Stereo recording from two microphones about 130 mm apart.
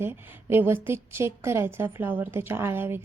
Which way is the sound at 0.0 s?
15° right (ahead or behind).